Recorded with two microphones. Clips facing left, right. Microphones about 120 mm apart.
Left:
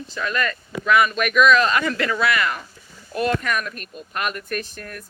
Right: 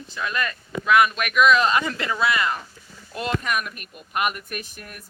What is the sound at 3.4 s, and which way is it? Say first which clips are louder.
Speech: left 1 dB; 10° right (ahead or behind).